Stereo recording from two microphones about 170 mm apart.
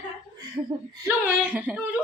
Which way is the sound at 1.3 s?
10° right (ahead or behind).